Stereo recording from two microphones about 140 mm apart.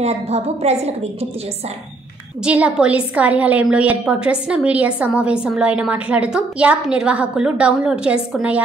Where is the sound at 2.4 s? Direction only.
10° right (ahead or behind).